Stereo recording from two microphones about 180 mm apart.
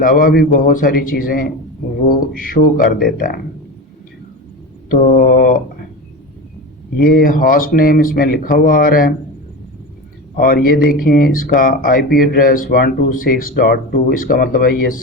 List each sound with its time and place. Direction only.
0.0 s speech: 50° left (ahead or behind)
4.9 s speech: 50° left (ahead or behind)
7.0 s speech: 55° left (ahead or behind)
10.3 s speech: 55° left (ahead or behind)